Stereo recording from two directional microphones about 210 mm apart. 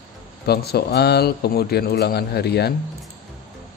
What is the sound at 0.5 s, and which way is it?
Speech, 50° left (ahead or behind).